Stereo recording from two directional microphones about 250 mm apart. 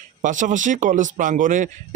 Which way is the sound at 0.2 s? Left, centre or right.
Right.